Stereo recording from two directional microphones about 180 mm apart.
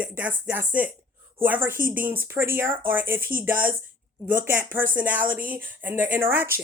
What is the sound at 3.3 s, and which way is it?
Speech, 50° right (ahead or behind).